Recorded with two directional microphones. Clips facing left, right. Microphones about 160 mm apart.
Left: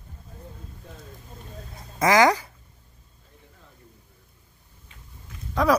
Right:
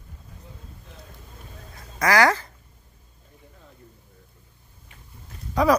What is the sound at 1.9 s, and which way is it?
Speech, 20° left (ahead or behind).